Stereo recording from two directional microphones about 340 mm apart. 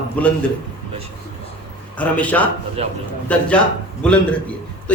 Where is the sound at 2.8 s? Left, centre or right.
Centre.